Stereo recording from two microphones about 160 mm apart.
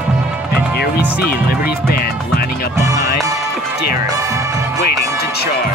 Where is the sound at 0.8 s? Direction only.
75° left (ahead or behind).